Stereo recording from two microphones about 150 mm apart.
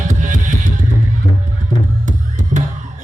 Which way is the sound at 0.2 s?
55° right (ahead or behind).